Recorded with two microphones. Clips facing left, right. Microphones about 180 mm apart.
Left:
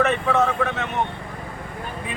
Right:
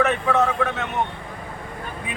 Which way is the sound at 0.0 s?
Centre (ahead or behind).